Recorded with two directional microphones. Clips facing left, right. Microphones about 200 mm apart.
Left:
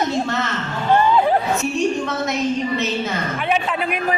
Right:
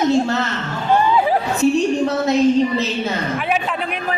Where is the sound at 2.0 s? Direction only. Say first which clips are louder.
Right 6 dB; 35° right (ahead or behind).